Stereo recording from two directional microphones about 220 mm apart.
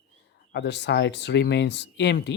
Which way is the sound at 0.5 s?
50° left (ahead or behind).